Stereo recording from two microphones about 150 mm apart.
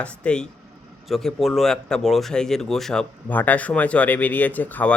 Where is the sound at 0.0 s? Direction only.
5° left (ahead or behind).